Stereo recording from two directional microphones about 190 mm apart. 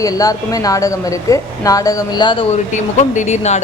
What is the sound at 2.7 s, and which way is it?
Speech, 40° left (ahead or behind).